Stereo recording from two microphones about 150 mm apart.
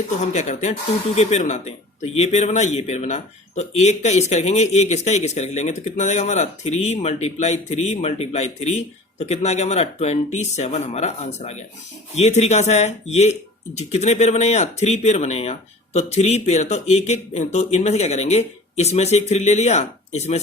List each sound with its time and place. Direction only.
0.2 s speech: 50° left (ahead or behind)